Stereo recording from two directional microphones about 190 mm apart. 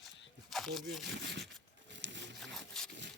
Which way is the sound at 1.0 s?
65° right (ahead or behind).